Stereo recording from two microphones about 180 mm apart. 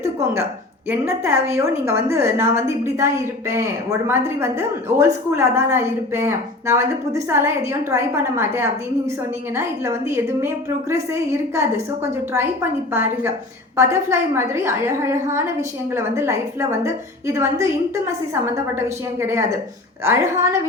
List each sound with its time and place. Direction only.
0.0 s a sound: 15° right (ahead or behind)
0.9 s a woman's voice: 15° right (ahead or behind)
19.2 s a woman's voice: 15° right (ahead or behind)